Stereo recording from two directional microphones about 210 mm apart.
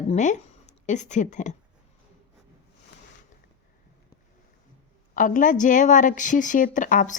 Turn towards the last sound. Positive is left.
turn(degrees=40)  # may be behind; listen again after turning